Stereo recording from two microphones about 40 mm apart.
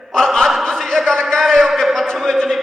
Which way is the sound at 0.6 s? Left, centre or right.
Centre.